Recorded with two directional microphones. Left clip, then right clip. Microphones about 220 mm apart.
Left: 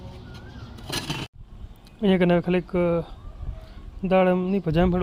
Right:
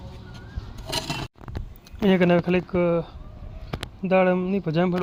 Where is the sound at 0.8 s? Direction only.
15° right (ahead or behind).